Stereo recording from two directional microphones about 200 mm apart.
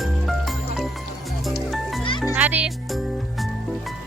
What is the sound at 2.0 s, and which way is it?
Music, 25° left (ahead or behind).